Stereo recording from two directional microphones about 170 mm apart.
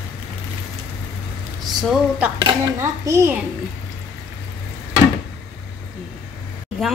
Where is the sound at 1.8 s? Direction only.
5° right (ahead or behind).